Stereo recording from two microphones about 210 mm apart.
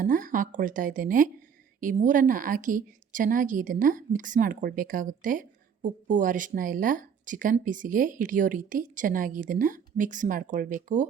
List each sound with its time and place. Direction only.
0.0 s a woman's voice: 40° right (ahead or behind)